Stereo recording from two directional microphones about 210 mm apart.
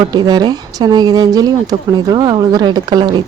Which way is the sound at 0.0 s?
20° right (ahead or behind).